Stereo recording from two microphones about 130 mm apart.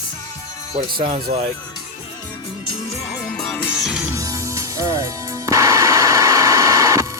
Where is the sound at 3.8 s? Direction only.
5° right (ahead or behind).